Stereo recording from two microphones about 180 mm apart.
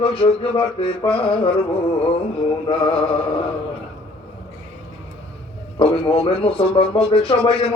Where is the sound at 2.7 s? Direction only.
30° left (ahead or behind).